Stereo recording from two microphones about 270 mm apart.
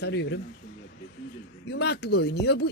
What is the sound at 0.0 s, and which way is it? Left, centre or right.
Speech, left.